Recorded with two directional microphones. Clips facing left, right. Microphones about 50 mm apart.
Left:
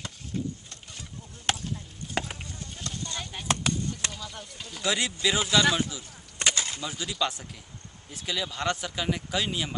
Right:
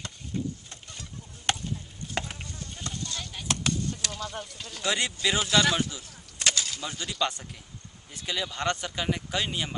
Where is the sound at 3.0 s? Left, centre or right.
Centre.